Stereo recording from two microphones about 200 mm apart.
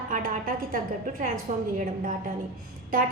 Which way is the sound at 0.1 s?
45° right (ahead or behind).